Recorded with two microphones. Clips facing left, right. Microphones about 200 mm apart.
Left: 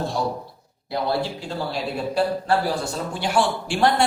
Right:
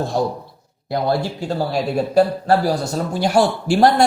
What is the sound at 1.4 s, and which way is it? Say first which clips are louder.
Speech: right 7 dB; 40° right (ahead or behind).